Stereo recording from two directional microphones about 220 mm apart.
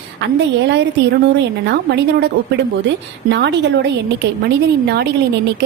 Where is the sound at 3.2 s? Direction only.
55° right (ahead or behind).